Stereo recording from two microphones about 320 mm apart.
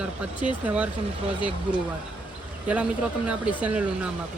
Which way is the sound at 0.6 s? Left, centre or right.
Centre.